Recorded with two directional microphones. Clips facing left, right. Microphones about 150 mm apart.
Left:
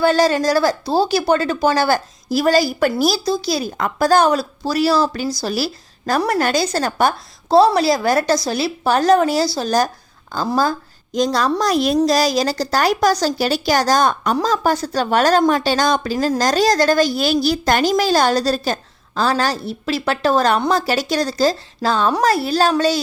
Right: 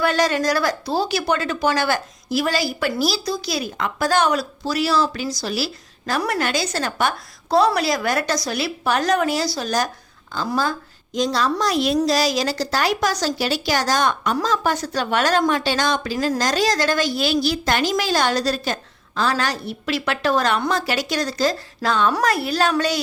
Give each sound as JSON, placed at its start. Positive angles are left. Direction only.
{"t": 0.0, "sound": "a woman's voice", "side_deg": 30}
{"t": 3.2, "sound": "a woman's voice", "side_deg": 30}